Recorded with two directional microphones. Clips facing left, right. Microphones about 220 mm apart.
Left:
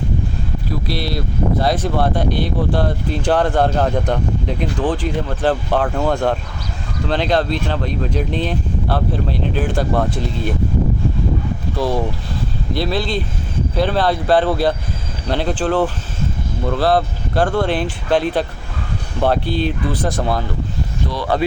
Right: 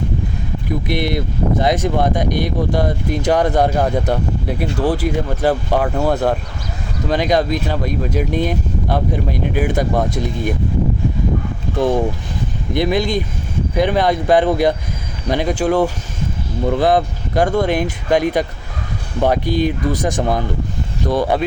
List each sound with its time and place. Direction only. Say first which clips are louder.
0.7 s speech: right 4 dB; 20° right (ahead or behind)
11.8 s speech: right 4 dB; 20° right (ahead or behind)